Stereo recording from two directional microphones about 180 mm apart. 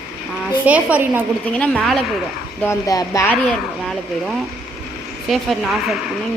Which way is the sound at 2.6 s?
20° left (ahead or behind).